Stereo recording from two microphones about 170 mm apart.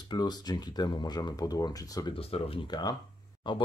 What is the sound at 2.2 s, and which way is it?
Speech, 35° left (ahead or behind).